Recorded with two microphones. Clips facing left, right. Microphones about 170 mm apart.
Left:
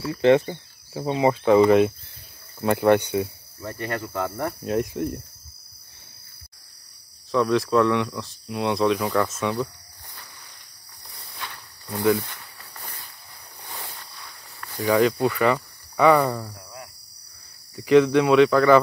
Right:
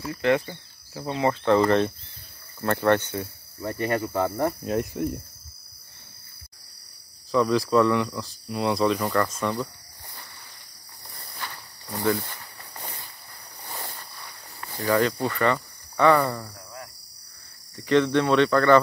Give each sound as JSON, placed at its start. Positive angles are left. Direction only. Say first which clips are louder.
{"t": 0.2, "sound": "speech", "louder": "left 6 dB", "side_deg": 25}
{"t": 1.6, "sound": "speech", "louder": "left 5 dB", "side_deg": 5}
{"t": 3.6, "sound": "cricket", "louder": "right 4 dB", "side_deg": -15}
{"t": 4.3, "sound": "speech", "louder": "right 1 dB", "side_deg": 0}
{"t": 7.2, "sound": "speech", "louder": "left 1 dB", "side_deg": 0}
{"t": 11.1, "sound": "a sound", "louder": "even", "side_deg": -5}
{"t": 11.9, "sound": "speech", "louder": "left 4 dB", "side_deg": 5}
{"t": 12.3, "sound": "snake", "louder": "right 1 dB", "side_deg": -10}
{"t": 13.7, "sound": "a sound", "louder": "right 1 dB", "side_deg": -5}
{"t": 14.2, "sound": "walk", "louder": "right 1 dB", "side_deg": -15}
{"t": 14.8, "sound": "speech", "louder": "left 3 dB", "side_deg": 0}
{"t": 17.7, "sound": "speech", "louder": "left 4 dB", "side_deg": 10}